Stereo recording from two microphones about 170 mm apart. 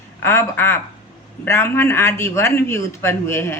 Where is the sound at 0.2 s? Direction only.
15° left (ahead or behind).